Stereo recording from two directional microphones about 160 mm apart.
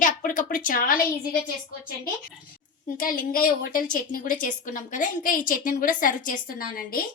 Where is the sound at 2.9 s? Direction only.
60° left (ahead or behind).